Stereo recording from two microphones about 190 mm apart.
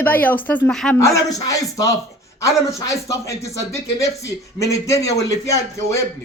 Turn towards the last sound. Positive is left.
turn(degrees=15)  # may be behind; listen again after turning